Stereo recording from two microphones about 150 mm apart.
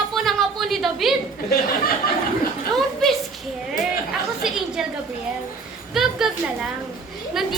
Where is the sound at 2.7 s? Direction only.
Centre (ahead or behind).